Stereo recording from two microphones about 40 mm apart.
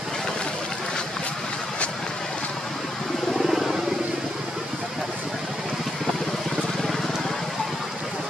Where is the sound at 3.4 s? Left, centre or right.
Centre.